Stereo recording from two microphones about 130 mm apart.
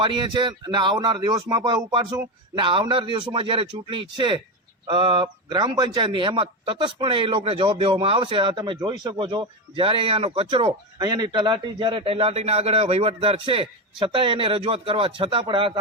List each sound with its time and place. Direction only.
0.0 s a man's voice: 40° right (ahead or behind)